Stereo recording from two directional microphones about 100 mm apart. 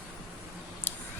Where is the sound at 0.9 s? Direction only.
20° left (ahead or behind).